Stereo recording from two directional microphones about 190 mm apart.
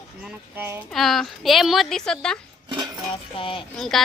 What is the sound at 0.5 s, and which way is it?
Speech, 10° right (ahead or behind).